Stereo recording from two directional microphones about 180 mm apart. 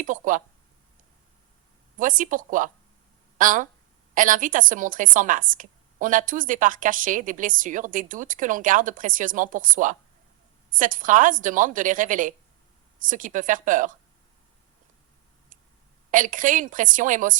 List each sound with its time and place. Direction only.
0.0 s a sound: 45° right (ahead or behind)
2.0 s a woman's voice: 50° right (ahead or behind)
16.1 s a woman's voice: 45° right (ahead or behind)